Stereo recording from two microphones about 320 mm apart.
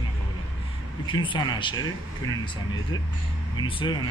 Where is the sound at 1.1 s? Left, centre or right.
Centre.